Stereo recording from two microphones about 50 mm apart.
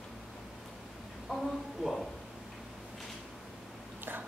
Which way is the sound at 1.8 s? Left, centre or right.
Centre.